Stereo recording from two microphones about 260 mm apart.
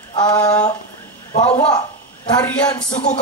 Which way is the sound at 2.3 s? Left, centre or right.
Centre.